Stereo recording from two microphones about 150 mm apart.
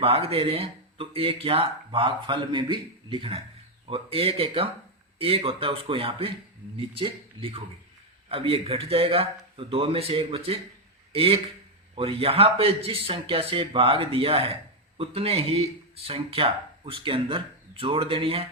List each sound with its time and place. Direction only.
0.0 s a man's voice: 40° right (ahead or behind)